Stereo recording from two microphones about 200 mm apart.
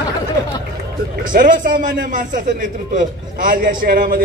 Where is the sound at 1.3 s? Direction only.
40° right (ahead or behind).